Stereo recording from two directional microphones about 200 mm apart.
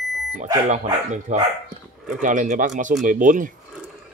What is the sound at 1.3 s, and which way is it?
Speech, 35° right (ahead or behind).